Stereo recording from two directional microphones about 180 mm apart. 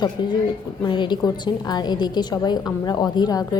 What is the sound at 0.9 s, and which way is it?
A woman's voice, 25° left (ahead or behind).